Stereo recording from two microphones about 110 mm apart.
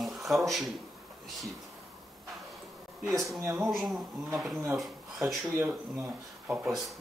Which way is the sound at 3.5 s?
5° right (ahead or behind).